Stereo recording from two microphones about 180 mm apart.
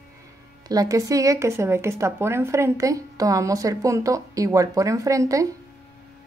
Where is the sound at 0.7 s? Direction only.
20° right (ahead or behind).